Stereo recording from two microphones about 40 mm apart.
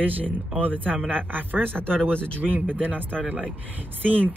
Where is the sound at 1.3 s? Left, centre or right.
Right.